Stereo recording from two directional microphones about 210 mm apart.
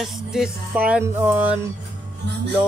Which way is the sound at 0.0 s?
Centre (ahead or behind).